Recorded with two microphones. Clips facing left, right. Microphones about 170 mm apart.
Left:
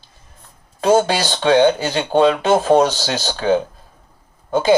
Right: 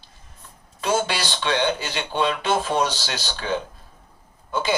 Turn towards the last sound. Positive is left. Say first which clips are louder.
# left 9 dB
turn(degrees=45)  # may be behind; listen again after turning